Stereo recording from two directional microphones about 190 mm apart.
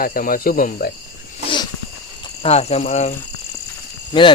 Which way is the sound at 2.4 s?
35° left (ahead or behind).